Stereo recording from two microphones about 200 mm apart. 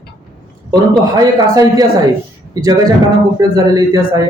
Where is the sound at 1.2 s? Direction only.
20° right (ahead or behind).